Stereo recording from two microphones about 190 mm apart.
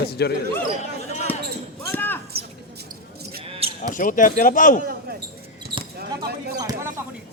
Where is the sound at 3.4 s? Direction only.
30° right (ahead or behind).